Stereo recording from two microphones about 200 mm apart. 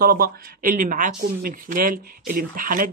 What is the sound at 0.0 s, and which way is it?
Speech, 45° right (ahead or behind).